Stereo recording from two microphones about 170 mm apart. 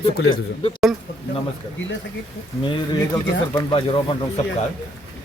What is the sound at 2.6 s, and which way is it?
Speech, 30° left (ahead or behind).